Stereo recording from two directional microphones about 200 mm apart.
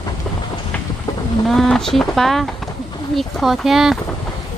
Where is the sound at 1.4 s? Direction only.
Centre (ahead or behind).